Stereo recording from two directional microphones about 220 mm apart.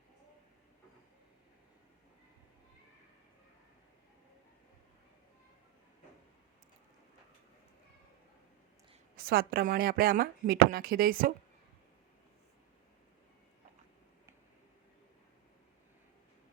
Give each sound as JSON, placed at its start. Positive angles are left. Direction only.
{"t": 9.1, "sound": "speech", "side_deg": -45}